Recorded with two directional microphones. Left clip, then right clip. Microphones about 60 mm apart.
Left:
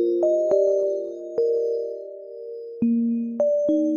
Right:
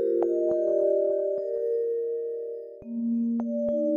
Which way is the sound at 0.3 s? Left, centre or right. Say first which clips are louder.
Left 5 dB; left.